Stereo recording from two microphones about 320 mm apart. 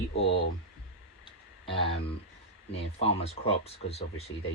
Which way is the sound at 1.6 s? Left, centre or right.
Centre.